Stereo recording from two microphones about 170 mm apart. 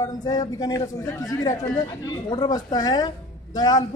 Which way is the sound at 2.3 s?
25° left (ahead or behind).